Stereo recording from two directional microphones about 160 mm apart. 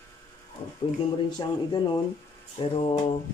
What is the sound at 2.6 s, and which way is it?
Mantra, 35° left (ahead or behind).